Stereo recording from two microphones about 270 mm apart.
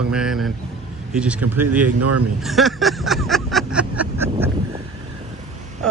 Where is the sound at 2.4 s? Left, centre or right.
Centre.